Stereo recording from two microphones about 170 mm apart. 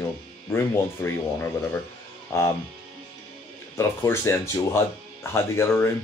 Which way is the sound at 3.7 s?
15° left (ahead or behind).